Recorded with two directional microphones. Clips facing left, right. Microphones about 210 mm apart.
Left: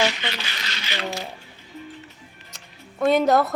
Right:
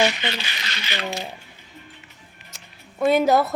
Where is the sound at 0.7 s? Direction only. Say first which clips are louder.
Right 1 dB; 55° right (ahead or behind).